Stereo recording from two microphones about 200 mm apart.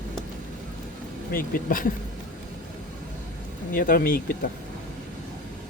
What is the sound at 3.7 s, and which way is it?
Speech, 45° left (ahead or behind).